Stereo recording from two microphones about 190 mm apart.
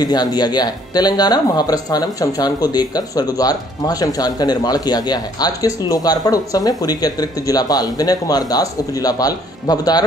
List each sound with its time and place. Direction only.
0.0 s speech: 20° left (ahead or behind)